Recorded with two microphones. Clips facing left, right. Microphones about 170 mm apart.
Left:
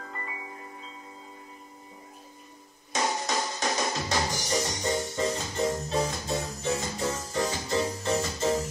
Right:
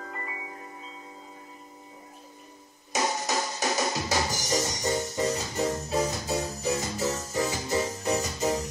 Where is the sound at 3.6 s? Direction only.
Centre (ahead or behind).